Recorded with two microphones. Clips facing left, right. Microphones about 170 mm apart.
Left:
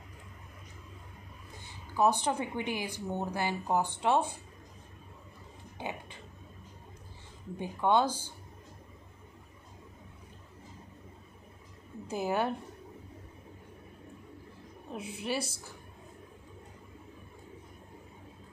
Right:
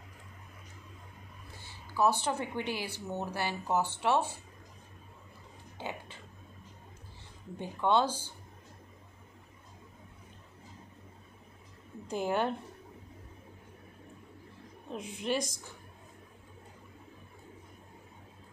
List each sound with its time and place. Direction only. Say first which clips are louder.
1.6 s a woman's voice: left 1 dB; 15° left (ahead or behind)
5.8 s a sound: left 1 dB; 15° left (ahead or behind)
7.5 s a woman's voice: left 1 dB; 10° left (ahead or behind)
12.1 s a woman's voice: even; 5° left (ahead or behind)
14.9 s a woman's voice: right 2 dB; 5° left (ahead or behind)